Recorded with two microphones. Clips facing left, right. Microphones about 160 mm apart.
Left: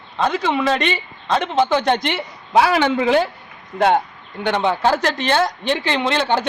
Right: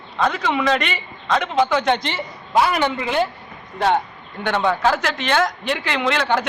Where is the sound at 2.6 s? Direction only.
90° left.